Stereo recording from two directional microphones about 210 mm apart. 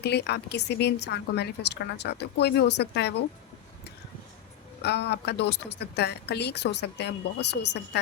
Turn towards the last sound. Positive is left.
turn(degrees=55)  # may be behind; listen again after turning